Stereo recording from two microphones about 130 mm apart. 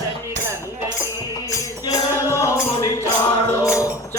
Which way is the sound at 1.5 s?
25° left (ahead or behind).